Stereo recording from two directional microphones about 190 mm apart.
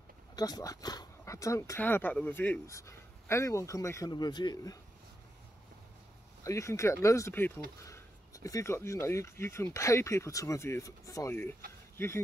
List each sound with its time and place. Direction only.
0.4 s speech: 20° left (ahead or behind)
6.4 s speech: 15° left (ahead or behind)